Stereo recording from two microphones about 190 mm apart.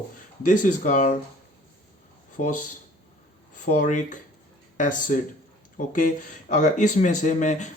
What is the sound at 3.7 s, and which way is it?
Speech, 40° left (ahead or behind).